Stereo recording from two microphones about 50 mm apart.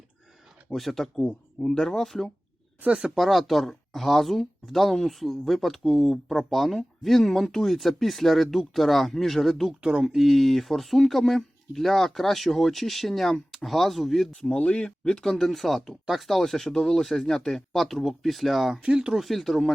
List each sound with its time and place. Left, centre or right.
0.7 s speech: centre
3.0 s speech: centre
9.8 s speech: centre
14.4 s speech: left
15.2 s speech: centre
18.8 s speech: centre
19.1 s speech: centre